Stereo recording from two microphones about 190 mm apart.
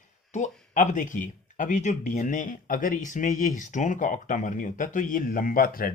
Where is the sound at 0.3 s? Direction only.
40° left (ahead or behind).